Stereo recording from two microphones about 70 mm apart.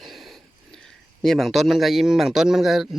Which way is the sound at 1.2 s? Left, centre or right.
Centre.